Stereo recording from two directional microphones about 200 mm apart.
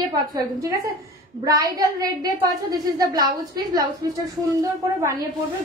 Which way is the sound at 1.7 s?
15° right (ahead or behind).